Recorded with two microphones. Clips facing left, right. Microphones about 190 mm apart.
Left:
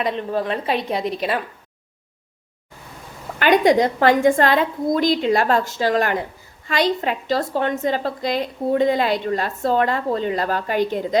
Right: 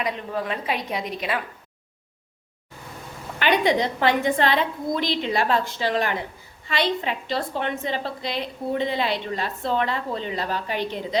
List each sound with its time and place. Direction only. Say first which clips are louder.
0.0 s a woman's voice: left 5 dB; 35° left (ahead or behind)
3.3 s a woman's voice: left 6 dB; 45° left (ahead or behind)